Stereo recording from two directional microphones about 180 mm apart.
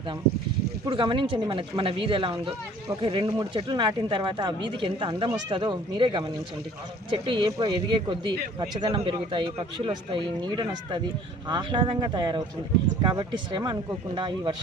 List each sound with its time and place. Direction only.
0.9 s speech: 25° right (ahead or behind)